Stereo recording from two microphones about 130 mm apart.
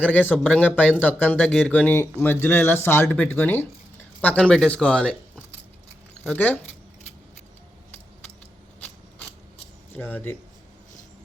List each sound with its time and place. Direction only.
0.0 s speech: 10° left (ahead or behind)
6.2 s speech: 15° left (ahead or behind)
9.9 s speech: 15° left (ahead or behind)